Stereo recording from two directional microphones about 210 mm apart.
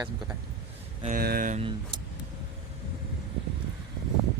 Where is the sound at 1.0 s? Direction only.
45° right (ahead or behind).